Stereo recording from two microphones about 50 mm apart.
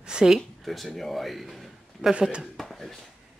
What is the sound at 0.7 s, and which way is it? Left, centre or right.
Speech, centre.